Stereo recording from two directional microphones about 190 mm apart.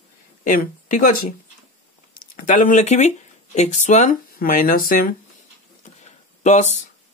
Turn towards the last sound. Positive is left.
turn(degrees=40)  # may be behind; listen again after turning